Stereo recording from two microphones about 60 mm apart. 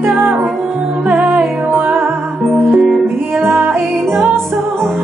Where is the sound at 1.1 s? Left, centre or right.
Right.